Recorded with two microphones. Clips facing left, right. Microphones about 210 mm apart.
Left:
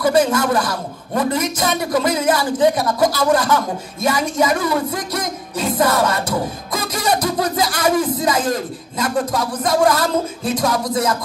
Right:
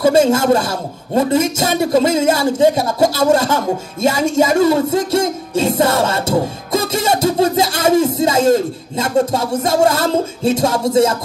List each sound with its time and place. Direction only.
0.0 s a man's voice: 25° right (ahead or behind)